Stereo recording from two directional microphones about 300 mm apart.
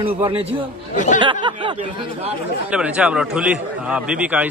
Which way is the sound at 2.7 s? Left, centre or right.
Centre.